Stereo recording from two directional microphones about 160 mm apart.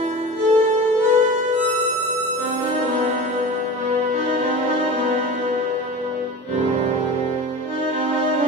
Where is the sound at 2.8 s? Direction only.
45° right (ahead or behind).